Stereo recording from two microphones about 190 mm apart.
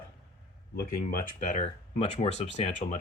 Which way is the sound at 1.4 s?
40° left (ahead or behind).